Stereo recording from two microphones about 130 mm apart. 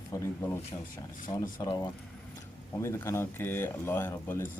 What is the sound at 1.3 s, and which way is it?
Speech, 35° left (ahead or behind).